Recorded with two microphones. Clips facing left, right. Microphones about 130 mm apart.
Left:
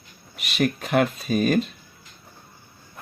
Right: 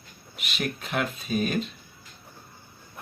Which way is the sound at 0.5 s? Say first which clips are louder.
Left 8 dB; 45° left (ahead or behind).